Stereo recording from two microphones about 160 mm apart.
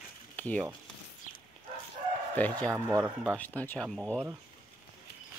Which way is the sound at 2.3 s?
10° left (ahead or behind).